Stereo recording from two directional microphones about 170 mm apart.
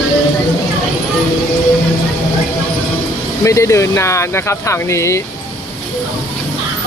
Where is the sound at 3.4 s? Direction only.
15° left (ahead or behind).